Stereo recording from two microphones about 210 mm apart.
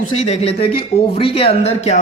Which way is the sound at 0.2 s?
30° left (ahead or behind).